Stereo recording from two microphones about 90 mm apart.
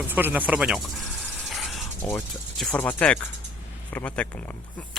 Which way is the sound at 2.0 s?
25° left (ahead or behind).